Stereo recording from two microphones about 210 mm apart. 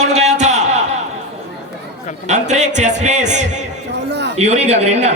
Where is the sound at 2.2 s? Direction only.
35° right (ahead or behind).